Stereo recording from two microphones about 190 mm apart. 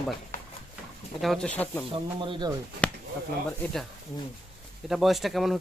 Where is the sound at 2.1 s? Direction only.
25° right (ahead or behind).